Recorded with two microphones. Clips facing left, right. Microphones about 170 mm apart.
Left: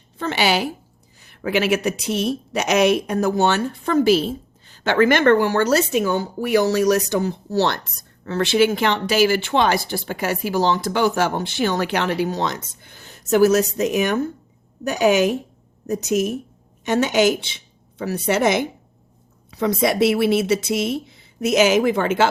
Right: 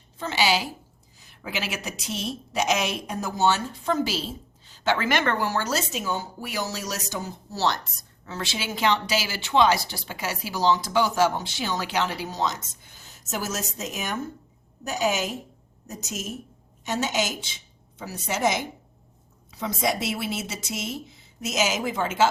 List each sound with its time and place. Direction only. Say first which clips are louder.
0.2 s a woman's voice: left 4 dB; 60° left (ahead or behind)